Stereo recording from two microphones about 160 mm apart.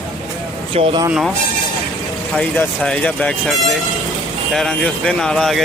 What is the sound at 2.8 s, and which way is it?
Speech, 5° left (ahead or behind).